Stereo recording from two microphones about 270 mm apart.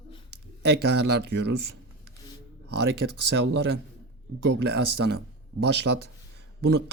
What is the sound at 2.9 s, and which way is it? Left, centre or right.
Speech, right.